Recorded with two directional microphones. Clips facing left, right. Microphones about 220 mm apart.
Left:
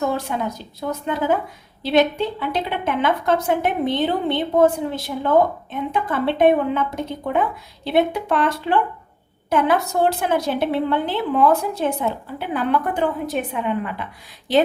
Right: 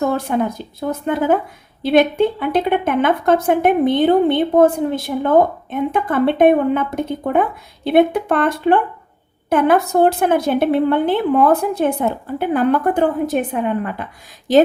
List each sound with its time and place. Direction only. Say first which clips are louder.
0.0 s a woman's voice: right 5 dB; 50° right (ahead or behind)